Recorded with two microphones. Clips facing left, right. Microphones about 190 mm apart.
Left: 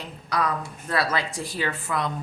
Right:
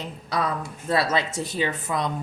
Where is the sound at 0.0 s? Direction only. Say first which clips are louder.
Even; 20° right (ahead or behind).